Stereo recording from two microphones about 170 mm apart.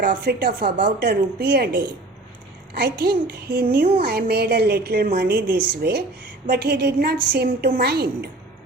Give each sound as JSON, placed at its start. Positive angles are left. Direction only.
{"t": 0.0, "sound": "a woman's voice", "side_deg": -70}